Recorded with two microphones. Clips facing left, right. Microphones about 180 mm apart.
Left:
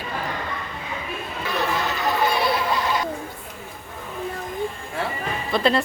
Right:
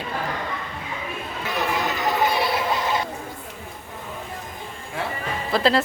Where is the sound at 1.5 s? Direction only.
20° right (ahead or behind).